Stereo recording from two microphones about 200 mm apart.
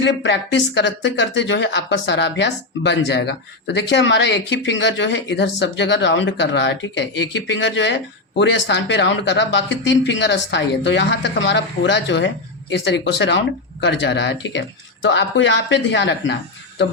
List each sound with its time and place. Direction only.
0.0 s speech: 60° left (ahead or behind)